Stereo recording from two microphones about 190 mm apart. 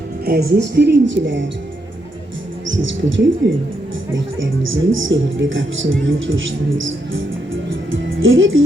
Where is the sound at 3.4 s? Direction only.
70° right (ahead or behind).